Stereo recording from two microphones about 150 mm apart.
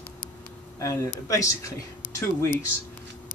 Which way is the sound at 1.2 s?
20° left (ahead or behind).